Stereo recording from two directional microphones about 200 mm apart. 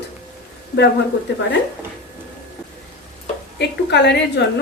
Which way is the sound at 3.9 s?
60° left (ahead or behind).